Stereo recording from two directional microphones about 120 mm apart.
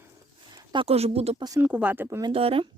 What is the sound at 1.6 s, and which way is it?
Speech, 15° right (ahead or behind).